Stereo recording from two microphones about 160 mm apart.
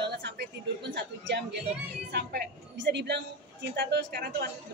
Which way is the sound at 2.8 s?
90° right.